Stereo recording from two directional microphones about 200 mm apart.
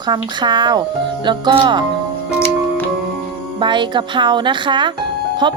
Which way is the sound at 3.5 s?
25° right (ahead or behind).